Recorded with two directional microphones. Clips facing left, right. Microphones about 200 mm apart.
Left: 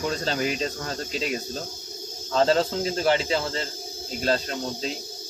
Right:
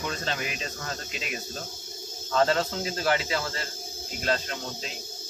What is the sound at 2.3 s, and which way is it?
Speech, 30° left (ahead or behind).